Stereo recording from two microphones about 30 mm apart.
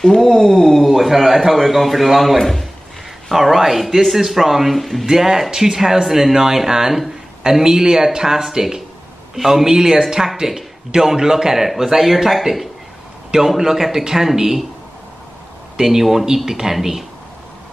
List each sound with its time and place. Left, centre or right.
0.0 s a sound: centre
0.8 s a man's voice: centre
2.3 s a man's voice: centre
3.3 s a man's voice: centre
4.7 s speech: centre
5.1 s a man's voice: centre
6.0 s a man's voice: centre
15.8 s a man's voice: centre